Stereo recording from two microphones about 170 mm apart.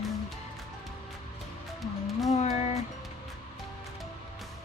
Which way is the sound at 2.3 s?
40° left (ahead or behind).